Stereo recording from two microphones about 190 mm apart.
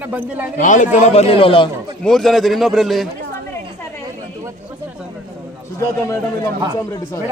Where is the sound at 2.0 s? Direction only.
Centre (ahead or behind).